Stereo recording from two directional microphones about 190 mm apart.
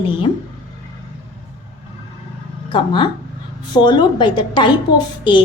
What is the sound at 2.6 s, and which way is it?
A woman's voice, 25° left (ahead or behind).